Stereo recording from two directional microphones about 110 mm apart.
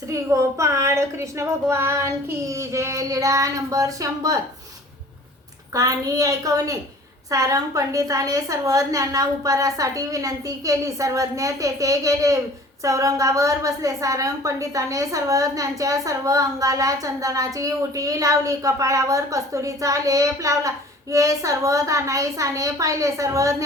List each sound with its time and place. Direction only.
0.1 s a woman's voice: 30° right (ahead or behind)
5.7 s a woman's voice: 30° right (ahead or behind)